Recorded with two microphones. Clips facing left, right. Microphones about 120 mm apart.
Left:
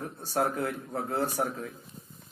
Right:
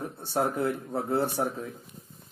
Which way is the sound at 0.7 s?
25° right (ahead or behind).